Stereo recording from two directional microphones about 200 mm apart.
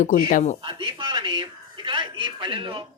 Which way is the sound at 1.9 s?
25° right (ahead or behind).